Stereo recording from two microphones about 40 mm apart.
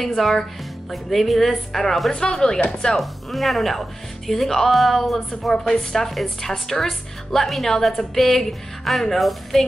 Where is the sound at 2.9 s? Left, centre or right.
Centre.